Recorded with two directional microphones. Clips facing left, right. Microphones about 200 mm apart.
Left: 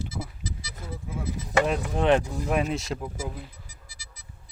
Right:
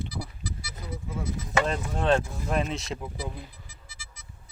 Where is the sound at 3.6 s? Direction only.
40° left (ahead or behind).